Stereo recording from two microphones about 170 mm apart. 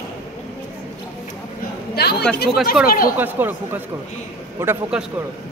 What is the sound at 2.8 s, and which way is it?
Speech, 60° left (ahead or behind).